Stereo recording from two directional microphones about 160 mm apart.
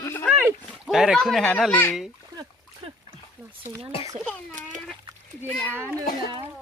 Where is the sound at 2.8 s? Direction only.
35° right (ahead or behind).